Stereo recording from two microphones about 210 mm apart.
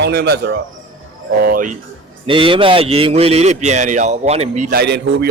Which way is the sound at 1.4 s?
40° right (ahead or behind).